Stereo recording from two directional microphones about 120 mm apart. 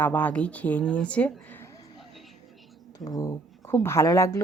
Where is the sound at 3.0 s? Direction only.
30° left (ahead or behind).